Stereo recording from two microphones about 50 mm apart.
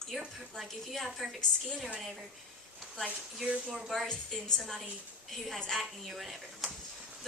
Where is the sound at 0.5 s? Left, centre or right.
Centre.